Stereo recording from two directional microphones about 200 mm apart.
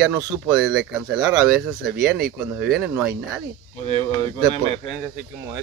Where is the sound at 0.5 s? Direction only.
5° right (ahead or behind).